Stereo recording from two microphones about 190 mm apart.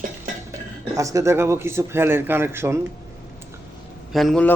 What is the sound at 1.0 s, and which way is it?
Speech, 15° right (ahead or behind).